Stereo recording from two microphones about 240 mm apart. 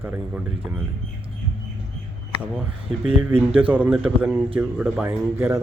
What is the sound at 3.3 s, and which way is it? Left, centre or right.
Speech, right.